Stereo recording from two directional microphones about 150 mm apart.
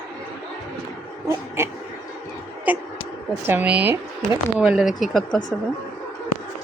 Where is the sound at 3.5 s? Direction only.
10° right (ahead or behind).